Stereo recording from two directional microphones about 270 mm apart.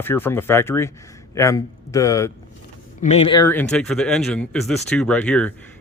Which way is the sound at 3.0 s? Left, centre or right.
Left.